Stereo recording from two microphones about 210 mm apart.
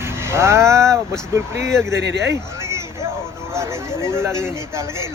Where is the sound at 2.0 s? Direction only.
55° right (ahead or behind).